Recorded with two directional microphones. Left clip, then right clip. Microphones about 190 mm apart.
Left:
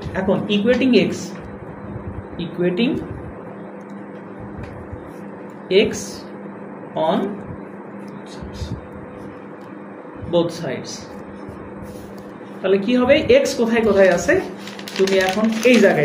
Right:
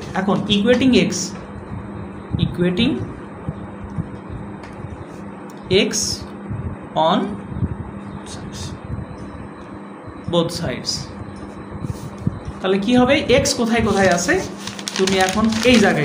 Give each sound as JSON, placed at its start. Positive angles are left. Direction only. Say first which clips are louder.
{"t": 0.1, "sound": "speech", "louder": "even", "side_deg": -55}
{"t": 2.3, "sound": "speech", "louder": "even", "side_deg": -55}
{"t": 5.7, "sound": "speech", "louder": "left 1 dB", "side_deg": -55}
{"t": 10.3, "sound": "speech", "louder": "left 1 dB", "side_deg": -55}
{"t": 12.6, "sound": "speech", "louder": "left 1 dB", "side_deg": -55}